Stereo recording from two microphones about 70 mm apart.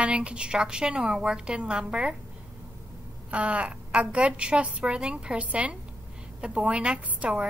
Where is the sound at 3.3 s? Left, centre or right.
Centre.